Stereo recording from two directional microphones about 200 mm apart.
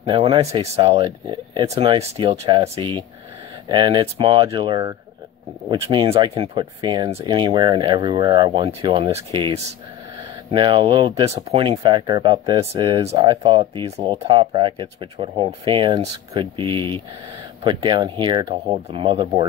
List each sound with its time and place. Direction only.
0.0 s speech: 25° right (ahead or behind)